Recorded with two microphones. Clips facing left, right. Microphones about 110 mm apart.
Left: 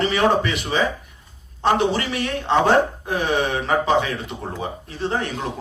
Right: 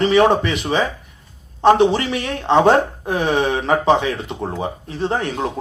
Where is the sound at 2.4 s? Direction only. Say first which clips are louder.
Right 4 dB; 30° right (ahead or behind).